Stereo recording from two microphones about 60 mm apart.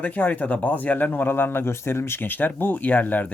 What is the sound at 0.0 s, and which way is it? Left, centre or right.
Speech, left.